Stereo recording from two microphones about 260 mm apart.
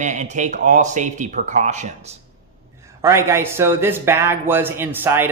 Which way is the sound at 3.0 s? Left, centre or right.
Centre.